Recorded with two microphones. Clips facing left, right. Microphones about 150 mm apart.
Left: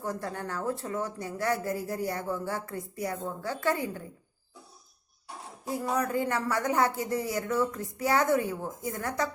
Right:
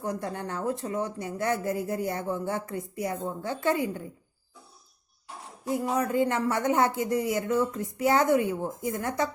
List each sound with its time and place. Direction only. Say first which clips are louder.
0.0 s speech: right 2 dB; 20° right (ahead or behind)
5.7 s speech: right 3 dB; 20° right (ahead or behind)